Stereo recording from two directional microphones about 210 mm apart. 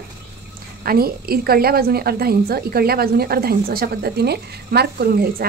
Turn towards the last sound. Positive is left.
turn(degrees=-45)  # may be behind; listen again after turning